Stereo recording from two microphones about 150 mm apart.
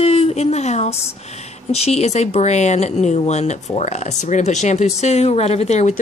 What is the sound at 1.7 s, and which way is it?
Speech, 45° left (ahead or behind).